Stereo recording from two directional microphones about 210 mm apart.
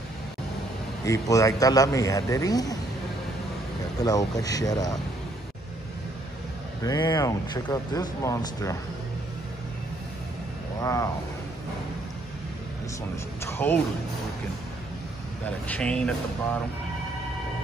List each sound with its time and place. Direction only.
1.0 s speech: 15° left (ahead or behind)
4.0 s speech: 15° left (ahead or behind)
6.8 s speech: 15° left (ahead or behind)
10.8 s speech: 15° left (ahead or behind)
13.4 s speech: 10° left (ahead or behind)
15.7 s speech: 5° left (ahead or behind)